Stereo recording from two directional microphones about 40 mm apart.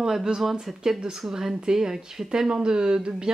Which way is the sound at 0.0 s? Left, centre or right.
Centre.